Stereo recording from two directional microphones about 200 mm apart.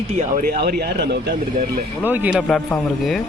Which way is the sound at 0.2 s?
45° right (ahead or behind).